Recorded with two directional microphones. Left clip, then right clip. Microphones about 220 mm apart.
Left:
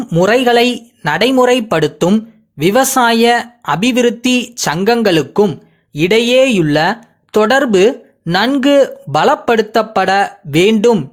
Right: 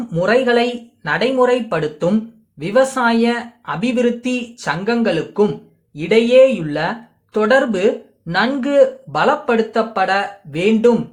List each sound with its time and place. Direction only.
0.0 s speech: 40° left (ahead or behind)